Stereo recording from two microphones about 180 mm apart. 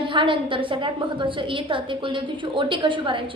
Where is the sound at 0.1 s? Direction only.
30° right (ahead or behind).